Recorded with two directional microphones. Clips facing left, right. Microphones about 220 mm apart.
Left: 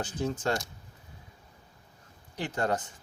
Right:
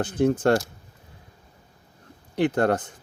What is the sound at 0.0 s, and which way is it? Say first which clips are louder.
Speech: right 10 dB; 55° right (ahead or behind).